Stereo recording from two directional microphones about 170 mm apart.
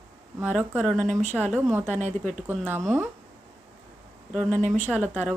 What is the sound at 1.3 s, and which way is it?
Speech, 10° right (ahead or behind).